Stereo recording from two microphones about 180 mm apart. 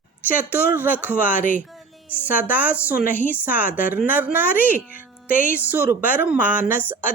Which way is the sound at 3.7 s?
50° left (ahead or behind).